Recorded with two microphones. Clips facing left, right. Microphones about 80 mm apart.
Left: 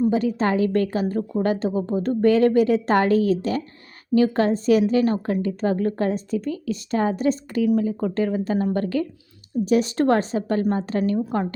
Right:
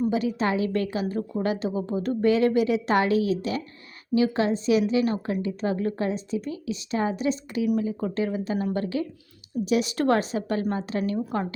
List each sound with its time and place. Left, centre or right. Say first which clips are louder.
0.1 s a woman's voice: left 4 dB; left